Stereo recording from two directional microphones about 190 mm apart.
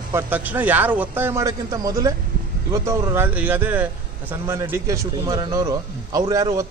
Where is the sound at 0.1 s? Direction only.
10° right (ahead or behind).